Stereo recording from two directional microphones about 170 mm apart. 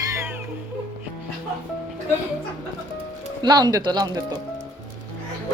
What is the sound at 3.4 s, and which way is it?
Speech, 25° right (ahead or behind).